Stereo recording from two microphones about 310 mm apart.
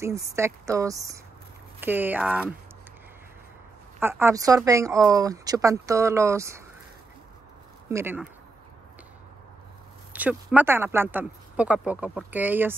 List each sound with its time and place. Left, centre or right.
0.0 s speech: centre
4.0 s speech: centre
7.9 s speech: centre
10.1 s speech: centre